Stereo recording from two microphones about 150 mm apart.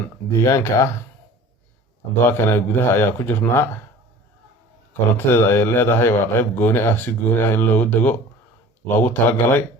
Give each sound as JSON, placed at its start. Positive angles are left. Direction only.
{"t": 0.3, "sound": "speech", "side_deg": 20}
{"t": 2.2, "sound": "a man's voice", "side_deg": 15}
{"t": 5.1, "sound": "a man's voice", "side_deg": 15}